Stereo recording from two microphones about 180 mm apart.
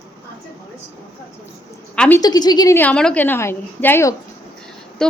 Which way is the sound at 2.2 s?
20° left (ahead or behind).